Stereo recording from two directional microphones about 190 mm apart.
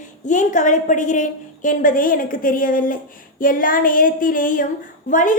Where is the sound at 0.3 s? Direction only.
40° left (ahead or behind).